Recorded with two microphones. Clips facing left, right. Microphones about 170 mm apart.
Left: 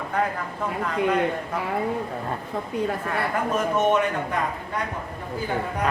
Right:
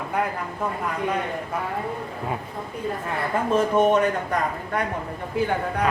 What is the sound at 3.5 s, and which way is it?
Speech, 35° right (ahead or behind).